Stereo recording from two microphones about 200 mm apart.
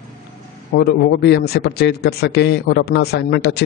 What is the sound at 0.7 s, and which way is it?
A man's voice, 55° left (ahead or behind).